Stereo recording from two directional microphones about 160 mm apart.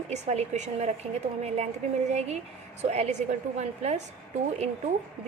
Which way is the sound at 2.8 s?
45° right (ahead or behind).